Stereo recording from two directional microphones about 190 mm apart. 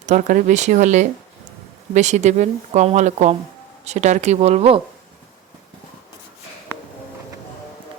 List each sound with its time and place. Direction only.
0.0 s speech: 40° right (ahead or behind)